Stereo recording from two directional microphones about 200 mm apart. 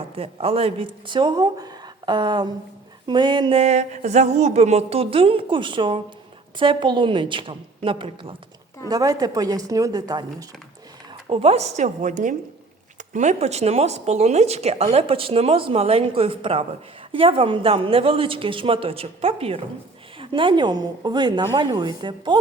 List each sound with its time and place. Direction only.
0.2 s speech: 30° right (ahead or behind)
11.3 s speech: 30° right (ahead or behind)